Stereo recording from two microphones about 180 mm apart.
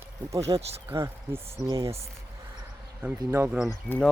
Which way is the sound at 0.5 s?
35° right (ahead or behind).